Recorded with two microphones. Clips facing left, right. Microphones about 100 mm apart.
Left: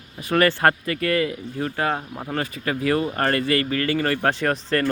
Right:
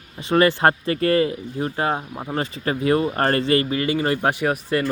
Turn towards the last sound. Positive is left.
turn(degrees=-10)  # may be behind; listen again after turning